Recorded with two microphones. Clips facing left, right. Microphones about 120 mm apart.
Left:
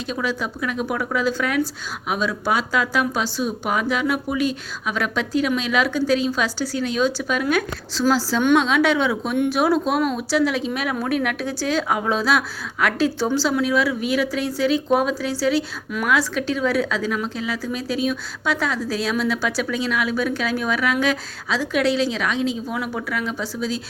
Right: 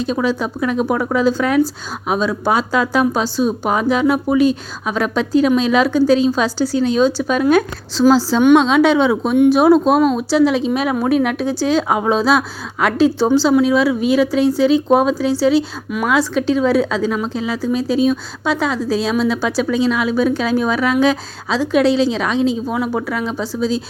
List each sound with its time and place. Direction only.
0.0 s a woman's voice: 30° right (ahead or behind)